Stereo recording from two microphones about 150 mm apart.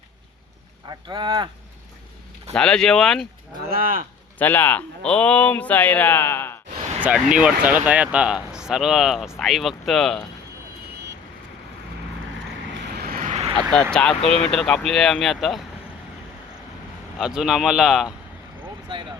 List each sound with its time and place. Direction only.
0.9 s speech: 30° right (ahead or behind)
2.5 s speech: 5° left (ahead or behind)
3.7 s speech: 70° right (ahead or behind)
4.4 s speech: 10° left (ahead or behind)
7.0 s speech: 10° right (ahead or behind)
12.9 s vehicle: 85° right
13.2 s vehicle: 45° right (ahead or behind)
13.6 s speech: 5° left (ahead or behind)
17.2 s speech: 5° right (ahead or behind)